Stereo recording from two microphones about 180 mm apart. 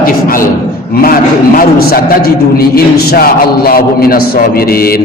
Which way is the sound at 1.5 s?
55° left (ahead or behind).